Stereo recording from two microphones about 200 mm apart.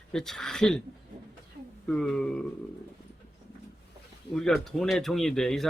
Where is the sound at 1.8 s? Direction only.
5° left (ahead or behind).